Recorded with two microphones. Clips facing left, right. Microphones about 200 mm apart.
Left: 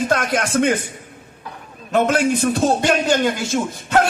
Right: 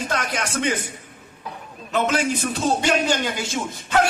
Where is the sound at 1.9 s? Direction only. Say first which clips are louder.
Left 5 dB; 55° left (ahead or behind).